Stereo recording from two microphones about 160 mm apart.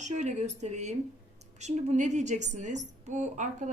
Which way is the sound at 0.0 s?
45° right (ahead or behind).